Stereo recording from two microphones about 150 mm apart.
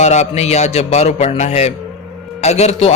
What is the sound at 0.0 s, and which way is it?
A man's voice, 50° left (ahead or behind).